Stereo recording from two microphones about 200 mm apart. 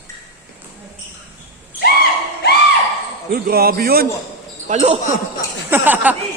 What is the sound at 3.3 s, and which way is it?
Speech, 50° right (ahead or behind).